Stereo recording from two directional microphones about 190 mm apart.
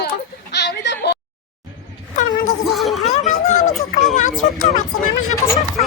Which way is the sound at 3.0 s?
35° left (ahead or behind).